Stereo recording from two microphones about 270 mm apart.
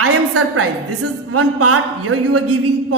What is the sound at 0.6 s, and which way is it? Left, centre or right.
A woman's voice, right.